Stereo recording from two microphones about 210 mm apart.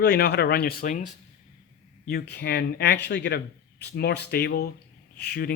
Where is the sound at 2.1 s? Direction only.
50° left (ahead or behind).